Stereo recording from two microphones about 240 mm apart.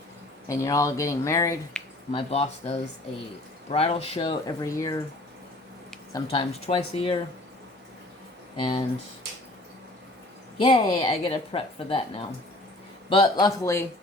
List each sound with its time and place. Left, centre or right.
0.4 s speech: centre
2.3 s a woman's voice: left
6.1 s a woman's voice: centre
10.6 s a woman's voice: centre